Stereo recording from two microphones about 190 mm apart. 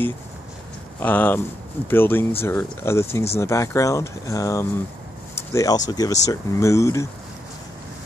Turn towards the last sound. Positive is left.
turn(degrees=15)  # may be behind; listen again after turning